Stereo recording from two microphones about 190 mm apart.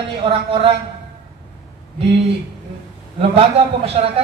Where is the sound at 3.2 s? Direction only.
30° right (ahead or behind).